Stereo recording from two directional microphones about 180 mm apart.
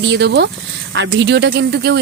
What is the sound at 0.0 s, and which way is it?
Speech, 70° right (ahead or behind).